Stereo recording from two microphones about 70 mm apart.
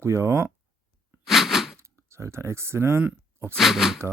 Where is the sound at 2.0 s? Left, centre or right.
Right.